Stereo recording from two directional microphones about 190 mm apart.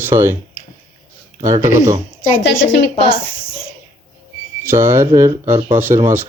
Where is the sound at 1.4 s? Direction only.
15° right (ahead or behind).